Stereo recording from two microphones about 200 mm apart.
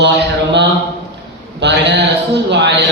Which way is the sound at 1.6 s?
60° right (ahead or behind).